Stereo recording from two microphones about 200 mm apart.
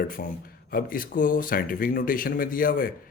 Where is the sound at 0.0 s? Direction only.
45° left (ahead or behind).